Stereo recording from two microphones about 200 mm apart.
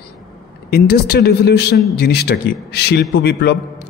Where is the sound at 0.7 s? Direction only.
50° left (ahead or behind).